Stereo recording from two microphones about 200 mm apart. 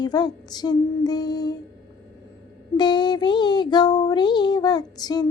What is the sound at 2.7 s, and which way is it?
Speech, 20° left (ahead or behind).